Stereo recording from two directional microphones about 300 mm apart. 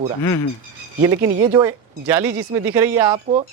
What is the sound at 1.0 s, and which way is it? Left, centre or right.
Speech, centre.